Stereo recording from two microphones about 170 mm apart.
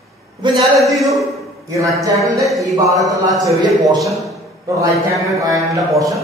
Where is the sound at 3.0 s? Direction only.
20° right (ahead or behind).